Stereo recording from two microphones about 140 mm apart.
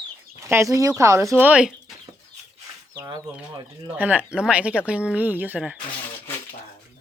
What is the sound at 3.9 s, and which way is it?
Speech, 10° right (ahead or behind).